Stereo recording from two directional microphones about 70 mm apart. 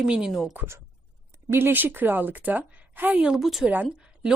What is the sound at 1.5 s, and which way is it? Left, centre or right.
A woman's voice, right.